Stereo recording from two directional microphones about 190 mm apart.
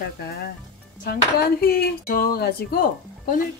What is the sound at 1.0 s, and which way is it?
Speech, 55° left (ahead or behind).